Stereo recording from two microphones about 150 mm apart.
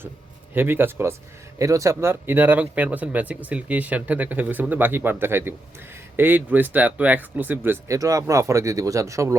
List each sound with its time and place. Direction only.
0.5 s speech: 15° right (ahead or behind)